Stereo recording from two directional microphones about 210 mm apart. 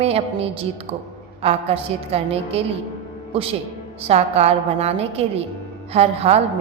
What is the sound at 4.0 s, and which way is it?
A woman's voice, 30° right (ahead or behind).